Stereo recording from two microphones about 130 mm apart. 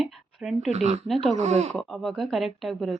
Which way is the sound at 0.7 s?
60° right (ahead or behind).